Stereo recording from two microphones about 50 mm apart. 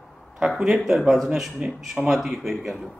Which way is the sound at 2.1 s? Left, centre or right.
Centre.